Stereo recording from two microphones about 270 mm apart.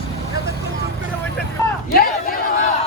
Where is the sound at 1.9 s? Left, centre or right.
Left.